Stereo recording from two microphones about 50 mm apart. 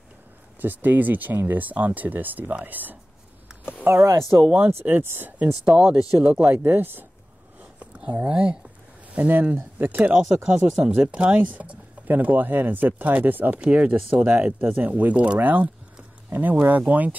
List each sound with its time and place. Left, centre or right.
0.6 s speech: right
3.9 s speech: right
4.6 s speech: right
5.5 s speech: centre
6.2 s speech: right
6.7 s speech: right
7.8 s speech: right
10.4 s speech: centre; by 13.6 s right
13.6 s speech: right
14.3 s speech: right